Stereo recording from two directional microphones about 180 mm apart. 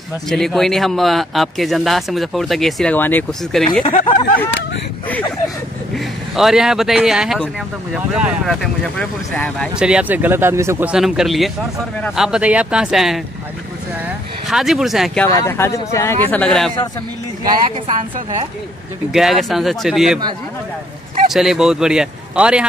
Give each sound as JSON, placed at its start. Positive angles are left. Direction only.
{"t": 0.3, "sound": "a man's voice", "side_deg": 0}
{"t": 3.8, "sound": "speech", "side_deg": 30}
{"t": 6.3, "sound": "a man's voice", "side_deg": 0}
{"t": 8.8, "sound": "speech", "side_deg": 5}
{"t": 9.8, "sound": "a man's voice", "side_deg": -5}
{"t": 14.5, "sound": "a man's voice", "side_deg": 0}
{"t": 15.2, "sound": "speech", "side_deg": 20}
{"t": 17.8, "sound": "a woman's voice", "side_deg": -30}
{"t": 19.1, "sound": "a man's voice", "side_deg": 0}
{"t": 21.3, "sound": "a man's voice", "side_deg": 0}